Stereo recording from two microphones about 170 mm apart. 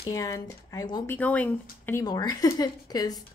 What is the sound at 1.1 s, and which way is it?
Speech, 10° left (ahead or behind).